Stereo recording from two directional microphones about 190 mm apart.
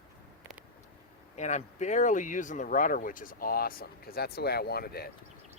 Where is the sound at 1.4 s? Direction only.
40° left (ahead or behind).